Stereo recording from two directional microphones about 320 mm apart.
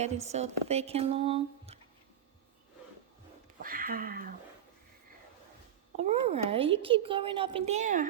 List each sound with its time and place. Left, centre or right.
0.3 s speech: right
3.6 s speech: right
6.0 s a child's voice: centre